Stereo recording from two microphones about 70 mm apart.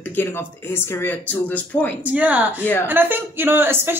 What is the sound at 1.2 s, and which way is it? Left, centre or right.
Speech, left.